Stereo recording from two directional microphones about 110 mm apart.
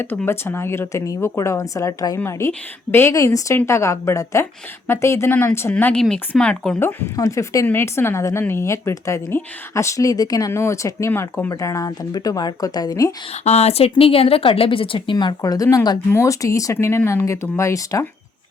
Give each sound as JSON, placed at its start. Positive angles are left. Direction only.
{"t": 0.3, "sound": "speech", "side_deg": 20}
{"t": 5.7, "sound": "speech", "side_deg": 10}
{"t": 6.7, "sound": "speech", "side_deg": 25}
{"t": 13.4, "sound": "speech", "side_deg": 75}
{"t": 13.9, "sound": "a woman's voice", "side_deg": 60}
{"t": 15.4, "sound": "a woman's voice", "side_deg": 30}